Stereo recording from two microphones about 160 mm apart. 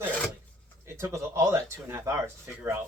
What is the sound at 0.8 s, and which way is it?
Speech, 15° right (ahead or behind).